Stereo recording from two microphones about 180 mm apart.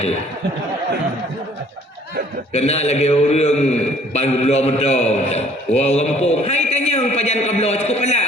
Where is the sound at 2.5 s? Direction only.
35° left (ahead or behind).